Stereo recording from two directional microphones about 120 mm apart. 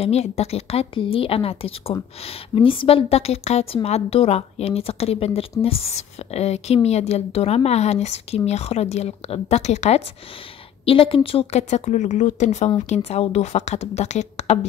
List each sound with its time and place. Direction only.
0.0 s speech: 60° left (ahead or behind)
10.9 s speech: 50° left (ahead or behind)
11.7 s speech: 90° left; by 14.7 s 70° left (ahead or behind)